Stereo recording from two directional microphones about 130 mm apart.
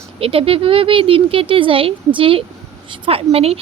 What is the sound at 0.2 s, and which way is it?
Speech, 45° right (ahead or behind).